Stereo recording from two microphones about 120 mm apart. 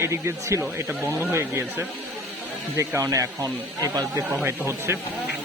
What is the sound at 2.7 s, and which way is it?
Speech, 25° right (ahead or behind).